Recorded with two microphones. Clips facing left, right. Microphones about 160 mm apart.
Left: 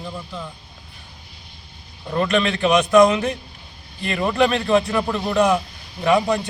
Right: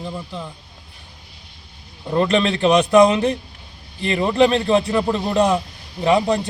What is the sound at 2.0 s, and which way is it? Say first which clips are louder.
A man's voice: right 2 dB; 30° right (ahead or behind).